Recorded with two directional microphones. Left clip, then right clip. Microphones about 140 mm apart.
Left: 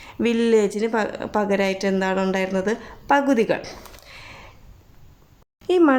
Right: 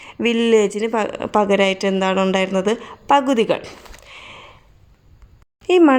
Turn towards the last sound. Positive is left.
turn(degrees=-25)  # may be behind; listen again after turning